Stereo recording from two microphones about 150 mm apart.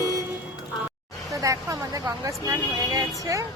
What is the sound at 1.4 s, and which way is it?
Speech, 20° right (ahead or behind).